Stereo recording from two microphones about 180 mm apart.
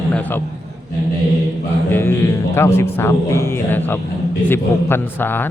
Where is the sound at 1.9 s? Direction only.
15° left (ahead or behind).